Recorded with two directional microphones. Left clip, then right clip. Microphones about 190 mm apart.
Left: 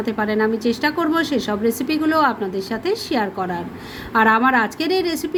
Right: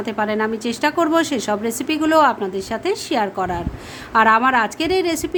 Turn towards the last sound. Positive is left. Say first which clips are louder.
# right 1 dB
turn(degrees=-15)  # may be behind; listen again after turning